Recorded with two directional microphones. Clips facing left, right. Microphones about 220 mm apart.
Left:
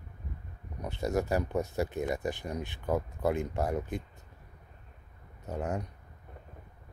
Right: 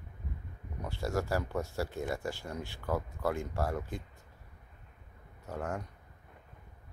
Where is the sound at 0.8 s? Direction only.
20° left (ahead or behind).